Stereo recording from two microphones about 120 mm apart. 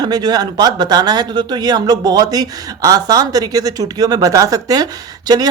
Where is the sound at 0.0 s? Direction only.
35° right (ahead or behind).